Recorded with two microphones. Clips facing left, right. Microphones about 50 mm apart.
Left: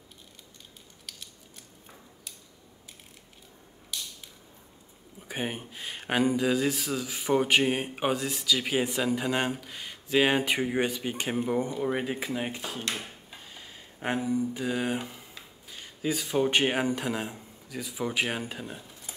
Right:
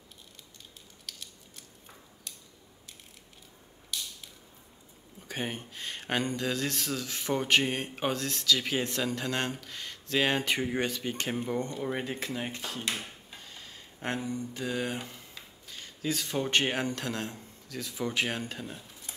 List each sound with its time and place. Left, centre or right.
1.1 s scissors: centre
3.9 s creak: centre
5.2 s speech: centre